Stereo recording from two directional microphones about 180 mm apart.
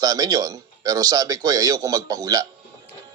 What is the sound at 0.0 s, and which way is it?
Speech, 20° right (ahead or behind).